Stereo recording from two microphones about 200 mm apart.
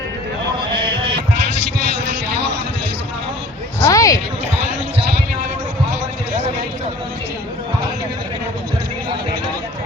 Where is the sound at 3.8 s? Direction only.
15° left (ahead or behind).